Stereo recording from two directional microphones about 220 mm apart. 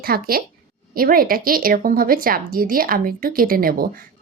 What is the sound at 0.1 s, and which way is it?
A woman's voice, 40° right (ahead or behind).